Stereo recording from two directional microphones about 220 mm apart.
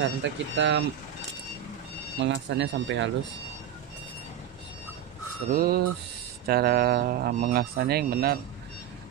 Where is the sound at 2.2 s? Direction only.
55° right (ahead or behind).